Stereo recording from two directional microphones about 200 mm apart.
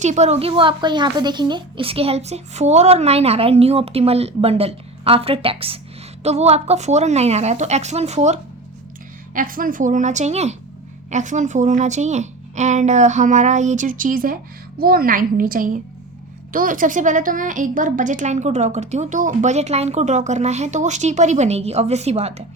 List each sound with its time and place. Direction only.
0.0 s a woman's voice: 35° right (ahead or behind)